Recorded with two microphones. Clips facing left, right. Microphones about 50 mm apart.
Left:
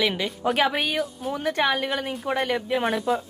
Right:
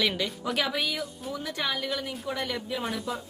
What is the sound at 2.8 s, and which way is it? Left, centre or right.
Speech, left.